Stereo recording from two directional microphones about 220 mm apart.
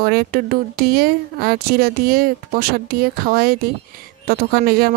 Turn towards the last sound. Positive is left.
turn(degrees=-45)  # may be behind; listen again after turning